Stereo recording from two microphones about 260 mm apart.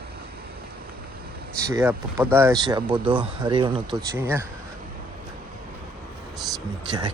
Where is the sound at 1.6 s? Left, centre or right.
Centre.